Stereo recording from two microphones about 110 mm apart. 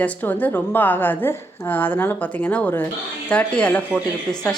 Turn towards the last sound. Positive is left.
turn(degrees=10)  # may be behind; listen again after turning